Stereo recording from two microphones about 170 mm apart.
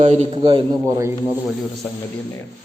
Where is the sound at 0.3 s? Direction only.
30° right (ahead or behind).